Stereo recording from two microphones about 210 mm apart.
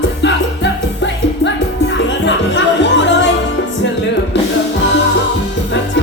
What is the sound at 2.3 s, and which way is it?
Music, 60° left (ahead or behind).